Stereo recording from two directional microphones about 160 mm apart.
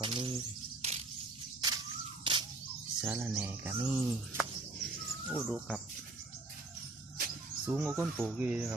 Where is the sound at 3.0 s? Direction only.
10° right (ahead or behind).